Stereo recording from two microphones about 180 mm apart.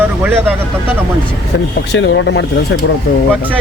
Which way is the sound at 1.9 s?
80° left.